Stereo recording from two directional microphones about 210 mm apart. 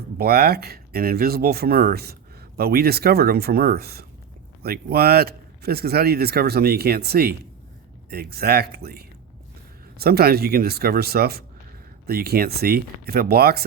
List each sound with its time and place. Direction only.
0.2 s speech: 45° right (ahead or behind)